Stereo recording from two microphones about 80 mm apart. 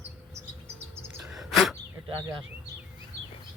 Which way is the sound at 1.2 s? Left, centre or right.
Centre.